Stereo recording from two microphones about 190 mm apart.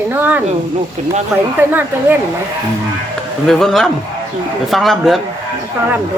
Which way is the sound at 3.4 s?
Centre (ahead or behind).